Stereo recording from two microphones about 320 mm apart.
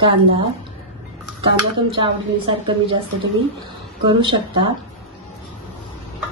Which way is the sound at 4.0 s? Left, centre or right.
Centre.